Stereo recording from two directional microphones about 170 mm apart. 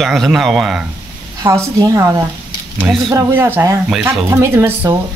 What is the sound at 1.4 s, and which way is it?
A woman's voice, 20° right (ahead or behind).